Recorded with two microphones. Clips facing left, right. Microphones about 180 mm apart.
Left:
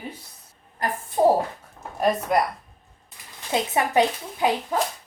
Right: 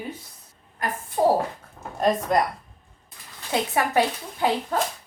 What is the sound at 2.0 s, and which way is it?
Speech, 5° left (ahead or behind).